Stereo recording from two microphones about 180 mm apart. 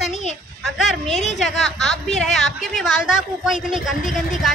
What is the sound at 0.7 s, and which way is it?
A woman's voice, centre (ahead or behind).